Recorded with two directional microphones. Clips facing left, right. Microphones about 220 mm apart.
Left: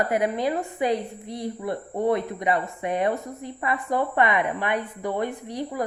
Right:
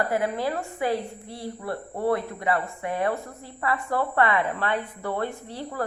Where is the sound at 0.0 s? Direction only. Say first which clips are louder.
Left 2 dB; 20° left (ahead or behind).